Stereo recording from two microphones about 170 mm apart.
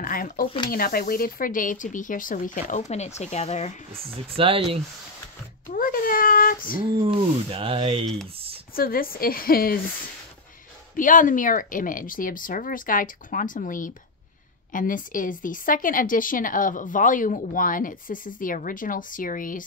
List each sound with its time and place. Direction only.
0.0 s a woman's voice: 55° left (ahead or behind); by 3.7 s 40° left (ahead or behind)
4.1 s speech: 30° right (ahead or behind)
5.7 s speech: 55° left (ahead or behind)
7.0 s speech: 35° right (ahead or behind)
8.0 s speech: 5° left (ahead or behind)
8.7 s a woman's voice: 60° left (ahead or behind)
11.0 s a woman's voice: 50° left (ahead or behind)